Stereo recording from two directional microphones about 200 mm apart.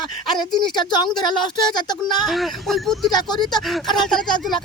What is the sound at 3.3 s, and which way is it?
Speech, 20° left (ahead or behind).